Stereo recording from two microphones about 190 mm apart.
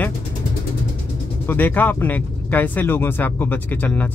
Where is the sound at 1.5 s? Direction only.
10° left (ahead or behind).